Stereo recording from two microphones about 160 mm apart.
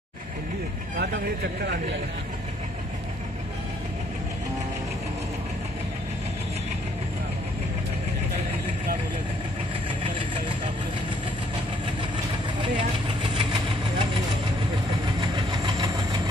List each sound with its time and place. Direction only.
10.0 s vehicle: 30° right (ahead or behind)
12.5 s vehicle: 30° right (ahead or behind)
15.1 s train: 30° right (ahead or behind)